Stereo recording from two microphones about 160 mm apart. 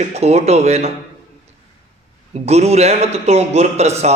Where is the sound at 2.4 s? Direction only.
40° right (ahead or behind).